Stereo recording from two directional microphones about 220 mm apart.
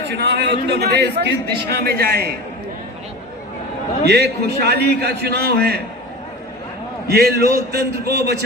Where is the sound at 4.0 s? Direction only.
50° right (ahead or behind).